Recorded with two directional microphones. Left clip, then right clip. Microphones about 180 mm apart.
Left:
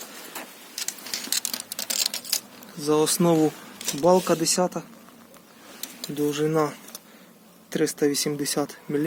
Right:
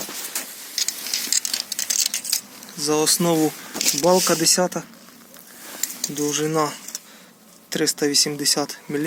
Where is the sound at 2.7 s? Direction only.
15° left (ahead or behind).